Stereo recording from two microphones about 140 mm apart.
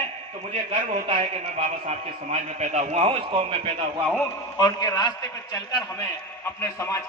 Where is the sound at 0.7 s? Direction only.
40° right (ahead or behind).